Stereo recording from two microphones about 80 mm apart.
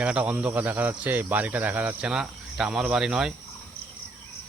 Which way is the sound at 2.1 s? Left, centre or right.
Centre.